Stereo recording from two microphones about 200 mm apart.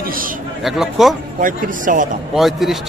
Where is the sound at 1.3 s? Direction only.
40° right (ahead or behind).